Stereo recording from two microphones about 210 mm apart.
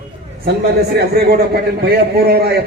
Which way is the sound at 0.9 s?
45° right (ahead or behind).